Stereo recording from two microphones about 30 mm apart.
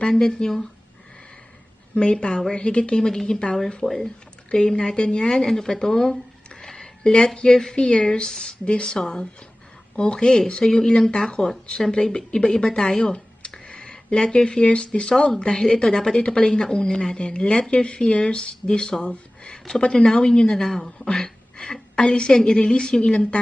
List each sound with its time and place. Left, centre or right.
0.1 s a woman's voice: left
2.0 s a woman's voice: left
3.8 s a woman's voice: centre; by 5.4 s left
5.4 s a sound: centre
7.3 s a woman's voice: left
15.4 s a woman's voice: left
20.1 s a woman's voice: left
20.7 s a woman's voice: centre
21.6 s speech: left